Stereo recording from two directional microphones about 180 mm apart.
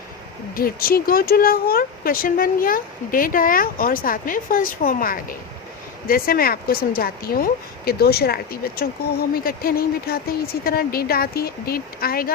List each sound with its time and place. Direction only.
0.5 s a woman's voice: 55° left (ahead or behind)